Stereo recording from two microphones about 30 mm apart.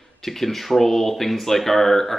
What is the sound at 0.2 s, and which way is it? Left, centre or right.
Speech, centre.